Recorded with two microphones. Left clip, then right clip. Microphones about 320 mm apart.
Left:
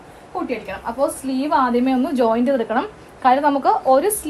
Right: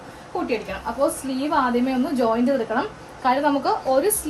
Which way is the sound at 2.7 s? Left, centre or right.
Centre.